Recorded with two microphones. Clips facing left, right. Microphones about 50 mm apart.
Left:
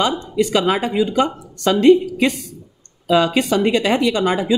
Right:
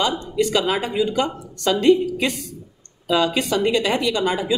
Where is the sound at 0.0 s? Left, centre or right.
Left.